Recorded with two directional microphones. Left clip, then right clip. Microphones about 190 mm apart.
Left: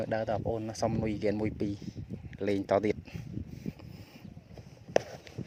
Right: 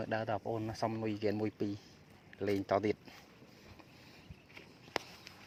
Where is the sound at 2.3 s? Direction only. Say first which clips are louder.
Left 5 dB; 50° left (ahead or behind).